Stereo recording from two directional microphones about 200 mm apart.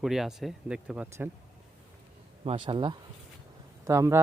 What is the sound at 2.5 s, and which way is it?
Speech, 25° right (ahead or behind).